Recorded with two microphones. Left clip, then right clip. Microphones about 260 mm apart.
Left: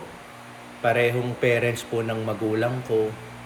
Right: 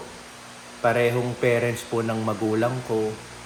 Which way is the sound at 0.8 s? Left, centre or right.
Centre.